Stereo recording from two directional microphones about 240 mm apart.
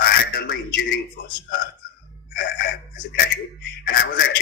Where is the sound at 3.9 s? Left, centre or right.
Left.